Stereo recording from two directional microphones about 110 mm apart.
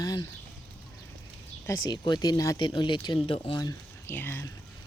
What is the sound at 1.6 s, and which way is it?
Speech, 35° left (ahead or behind).